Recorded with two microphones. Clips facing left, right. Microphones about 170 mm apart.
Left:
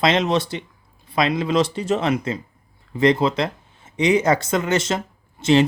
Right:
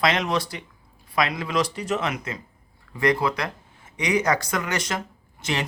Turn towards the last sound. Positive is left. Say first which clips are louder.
# left 12 dB
turn(degrees=25)  # may be behind; listen again after turning